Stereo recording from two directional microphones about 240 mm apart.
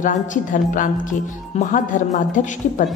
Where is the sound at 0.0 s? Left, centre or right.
Left.